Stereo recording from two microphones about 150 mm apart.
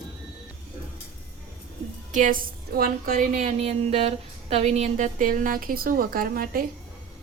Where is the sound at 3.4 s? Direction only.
50° right (ahead or behind); by 6.6 s 75° right (ahead or behind).